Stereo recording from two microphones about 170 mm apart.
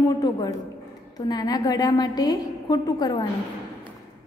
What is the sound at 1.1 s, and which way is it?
A woman's voice, 25° left (ahead or behind).